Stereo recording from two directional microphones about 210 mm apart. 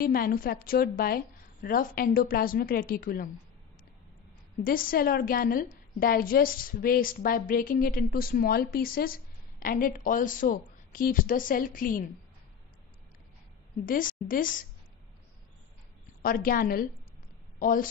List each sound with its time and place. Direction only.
0.0 s a woman's voice: 45° left (ahead or behind)
4.6 s a woman's voice: 45° left (ahead or behind)
13.8 s a woman's voice: 40° left (ahead or behind)
16.2 s a woman's voice: 45° left (ahead or behind)